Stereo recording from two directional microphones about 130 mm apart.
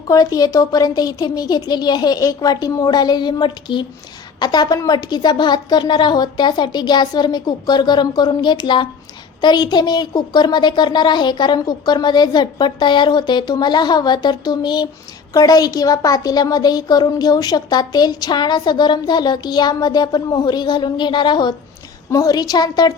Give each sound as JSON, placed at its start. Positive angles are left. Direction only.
{"t": 0.1, "sound": "a woman's voice", "side_deg": 30}